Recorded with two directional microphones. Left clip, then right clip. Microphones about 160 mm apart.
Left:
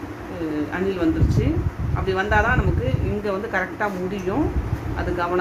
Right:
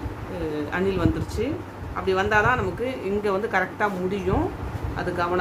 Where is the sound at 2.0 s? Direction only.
25° right (ahead or behind).